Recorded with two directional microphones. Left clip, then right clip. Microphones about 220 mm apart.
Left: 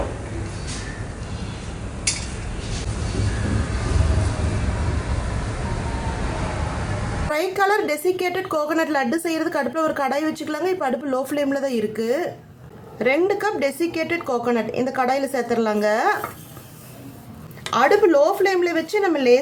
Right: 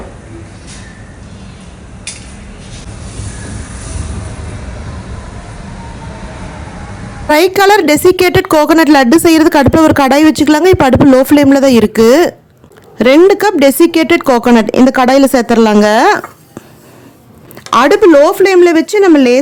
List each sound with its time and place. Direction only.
7.3 s a woman's voice: 45° right (ahead or behind)
17.7 s a woman's voice: 50° right (ahead or behind)